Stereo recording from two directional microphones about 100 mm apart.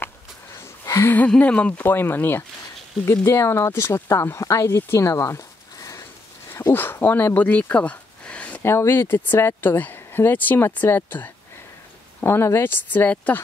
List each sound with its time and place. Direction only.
0.8 s a sound: 30° left (ahead or behind)
1.1 s speech: 15° left (ahead or behind); by 6.0 s 30° left (ahead or behind)
6.5 s speech: 20° left (ahead or behind)
8.6 s speech: 25° left (ahead or behind)